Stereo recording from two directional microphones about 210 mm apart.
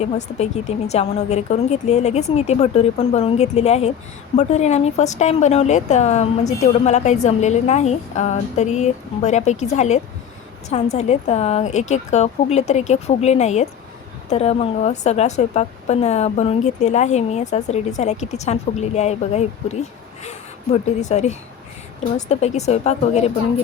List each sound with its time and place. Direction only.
0.0 s a woman's voice: 30° left (ahead or behind)